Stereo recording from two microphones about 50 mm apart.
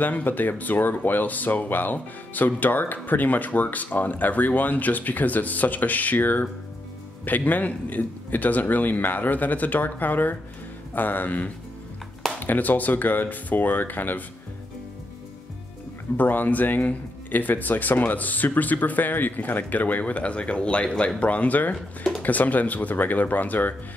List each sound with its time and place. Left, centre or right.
0.0 s speech: left
16.2 s speech: left
21.7 s speech: centre
22.2 s speech: left